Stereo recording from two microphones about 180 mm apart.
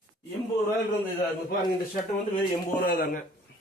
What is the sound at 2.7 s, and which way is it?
Speech, 55° left (ahead or behind).